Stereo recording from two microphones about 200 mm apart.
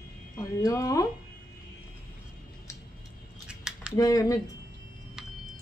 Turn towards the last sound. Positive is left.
turn(degrees=15)  # may be behind; listen again after turning